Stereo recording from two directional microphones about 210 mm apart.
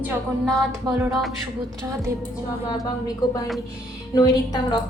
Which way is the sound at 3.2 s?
20° left (ahead or behind).